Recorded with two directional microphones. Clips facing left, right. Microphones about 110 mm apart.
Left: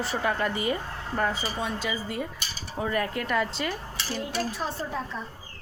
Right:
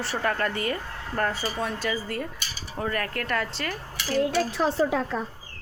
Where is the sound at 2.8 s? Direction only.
10° left (ahead or behind).